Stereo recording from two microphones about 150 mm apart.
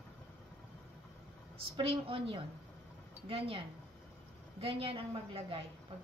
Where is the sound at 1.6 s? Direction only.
40° right (ahead or behind).